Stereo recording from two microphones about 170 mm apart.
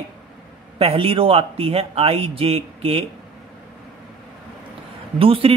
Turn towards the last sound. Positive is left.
turn(degrees=-35)  # may be behind; listen again after turning